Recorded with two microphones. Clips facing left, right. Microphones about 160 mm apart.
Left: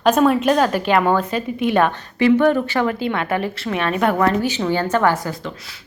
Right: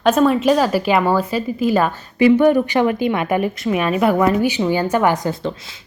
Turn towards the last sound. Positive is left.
turn(degrees=-20)  # may be behind; listen again after turning